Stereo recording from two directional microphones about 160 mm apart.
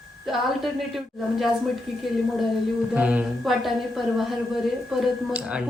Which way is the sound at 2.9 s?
5° right (ahead or behind).